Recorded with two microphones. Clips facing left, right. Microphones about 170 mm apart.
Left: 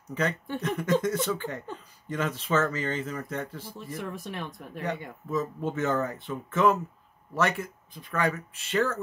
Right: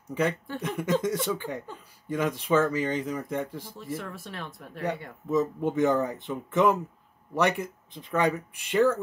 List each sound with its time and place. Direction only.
0.1 s speech: 15° right (ahead or behind)
3.7 s speech: 15° left (ahead or behind)
5.3 s speech: 15° right (ahead or behind)